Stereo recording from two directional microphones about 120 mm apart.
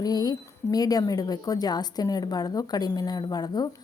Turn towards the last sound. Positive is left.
turn(degrees=35)  # may be behind; listen again after turning